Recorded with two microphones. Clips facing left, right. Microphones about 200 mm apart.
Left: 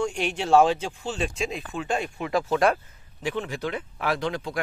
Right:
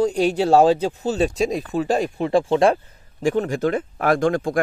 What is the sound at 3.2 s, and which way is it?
Speech, 45° right (ahead or behind).